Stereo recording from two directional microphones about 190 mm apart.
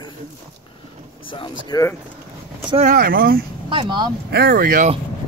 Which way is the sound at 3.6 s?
25° right (ahead or behind).